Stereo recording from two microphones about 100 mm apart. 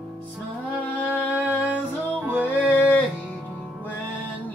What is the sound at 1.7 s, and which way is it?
Music, 15° right (ahead or behind).